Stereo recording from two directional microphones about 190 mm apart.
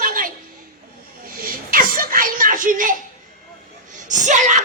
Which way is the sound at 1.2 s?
50° right (ahead or behind).